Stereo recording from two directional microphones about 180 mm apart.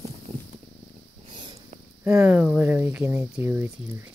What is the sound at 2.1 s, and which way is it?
Speech, 10° right (ahead or behind).